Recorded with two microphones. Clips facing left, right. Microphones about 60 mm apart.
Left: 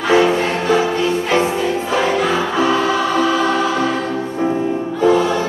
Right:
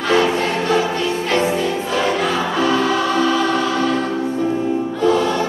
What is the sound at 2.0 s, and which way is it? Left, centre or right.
Choir, centre.